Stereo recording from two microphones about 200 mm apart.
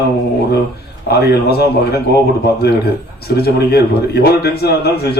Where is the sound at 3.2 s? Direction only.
50° left (ahead or behind).